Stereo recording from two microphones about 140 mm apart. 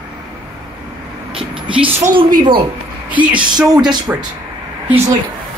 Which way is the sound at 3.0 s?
10° right (ahead or behind).